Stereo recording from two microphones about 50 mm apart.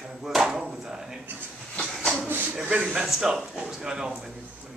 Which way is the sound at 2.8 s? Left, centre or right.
Centre.